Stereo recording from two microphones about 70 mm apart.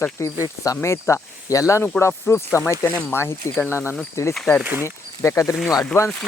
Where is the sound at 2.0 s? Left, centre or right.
Left.